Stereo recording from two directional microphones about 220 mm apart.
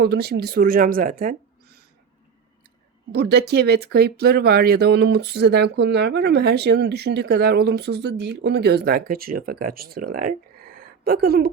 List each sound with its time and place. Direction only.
0.0 s speech: 45° right (ahead or behind)
3.1 s speech: 50° right (ahead or behind)